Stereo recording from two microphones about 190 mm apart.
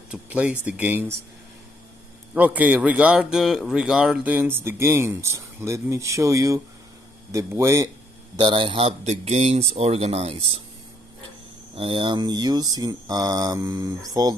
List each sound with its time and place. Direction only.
0.1 s a man's voice: 5° right (ahead or behind)
2.3 s a man's voice: 10° right (ahead or behind); by 10.6 s 30° right (ahead or behind)
11.7 s mantra: 25° right (ahead or behind)